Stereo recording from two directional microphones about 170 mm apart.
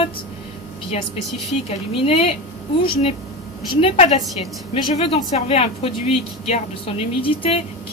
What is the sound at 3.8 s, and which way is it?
A woman's voice, 40° left (ahead or behind).